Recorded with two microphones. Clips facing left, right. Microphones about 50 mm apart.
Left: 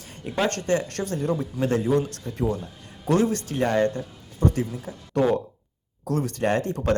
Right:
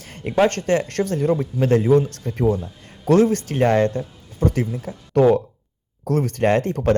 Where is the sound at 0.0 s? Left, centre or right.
Right.